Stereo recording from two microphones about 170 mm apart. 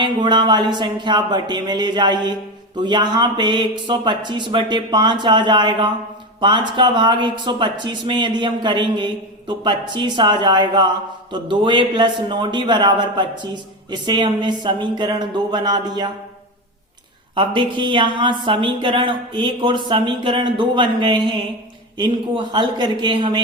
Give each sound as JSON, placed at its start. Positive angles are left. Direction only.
{"t": 0.0, "sound": "speech", "side_deg": -25}
{"t": 17.3, "sound": "speech", "side_deg": -30}
{"t": 22.5, "sound": "speech", "side_deg": -25}